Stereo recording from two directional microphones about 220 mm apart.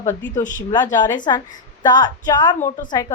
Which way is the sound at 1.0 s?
20° left (ahead or behind).